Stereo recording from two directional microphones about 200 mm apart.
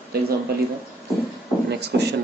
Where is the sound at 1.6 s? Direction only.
55° right (ahead or behind).